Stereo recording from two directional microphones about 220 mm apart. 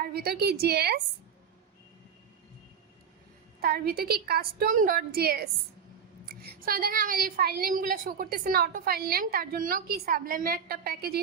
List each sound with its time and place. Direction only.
0.0 s a woman's voice: 45° right (ahead or behind)
3.6 s a woman's voice: 45° right (ahead or behind)